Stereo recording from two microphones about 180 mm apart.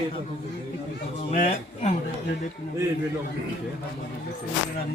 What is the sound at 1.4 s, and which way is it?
Speech, 40° left (ahead or behind).